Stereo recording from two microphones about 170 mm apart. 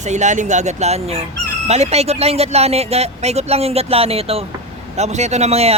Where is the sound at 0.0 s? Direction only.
45° right (ahead or behind).